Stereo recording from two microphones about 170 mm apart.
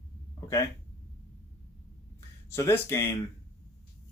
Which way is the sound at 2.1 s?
15° left (ahead or behind).